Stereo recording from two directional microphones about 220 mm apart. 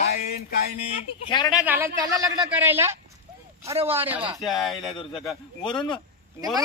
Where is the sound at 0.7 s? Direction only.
25° left (ahead or behind).